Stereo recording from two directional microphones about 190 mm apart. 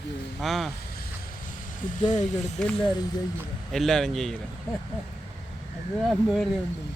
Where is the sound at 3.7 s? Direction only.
Centre (ahead or behind).